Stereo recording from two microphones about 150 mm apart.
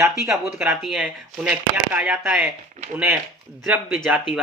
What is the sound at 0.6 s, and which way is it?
Speech, 5° right (ahead or behind).